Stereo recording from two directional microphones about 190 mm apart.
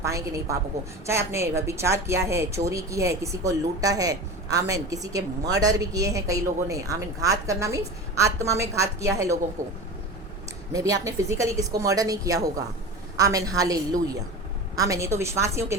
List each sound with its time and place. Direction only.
0.0 s a woman's voice: 15° right (ahead or behind)
10.7 s a woman's voice: 20° right (ahead or behind)